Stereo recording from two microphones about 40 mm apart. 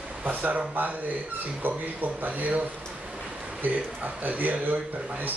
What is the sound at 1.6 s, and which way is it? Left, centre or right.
Speech, right.